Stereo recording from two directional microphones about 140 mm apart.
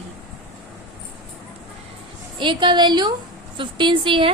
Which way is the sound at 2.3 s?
35° right (ahead or behind).